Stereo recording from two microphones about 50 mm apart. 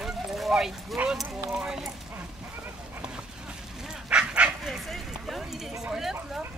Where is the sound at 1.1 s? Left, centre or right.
Centre.